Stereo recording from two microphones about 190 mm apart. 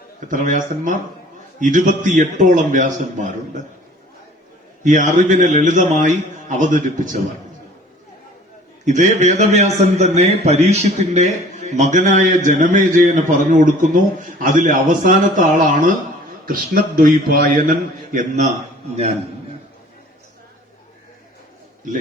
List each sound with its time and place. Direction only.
0.3 s a man's voice: 45° right (ahead or behind)
4.8 s a man's voice: 40° right (ahead or behind)
8.8 s a man's voice: 40° right (ahead or behind)